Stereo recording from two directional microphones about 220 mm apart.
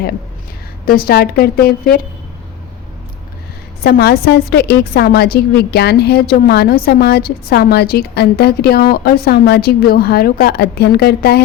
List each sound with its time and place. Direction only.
0.9 s a woman's voice: 45° left (ahead or behind)
3.8 s a woman's voice: 45° left (ahead or behind)